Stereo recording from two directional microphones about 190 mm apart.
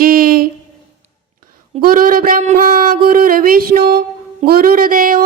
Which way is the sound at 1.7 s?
50° right (ahead or behind).